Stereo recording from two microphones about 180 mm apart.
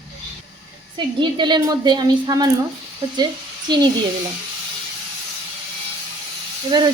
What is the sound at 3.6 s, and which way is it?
Speech, 25° right (ahead or behind).